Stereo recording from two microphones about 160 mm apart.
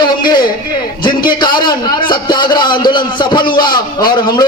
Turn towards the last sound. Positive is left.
turn(degrees=25)  # may be behind; listen again after turning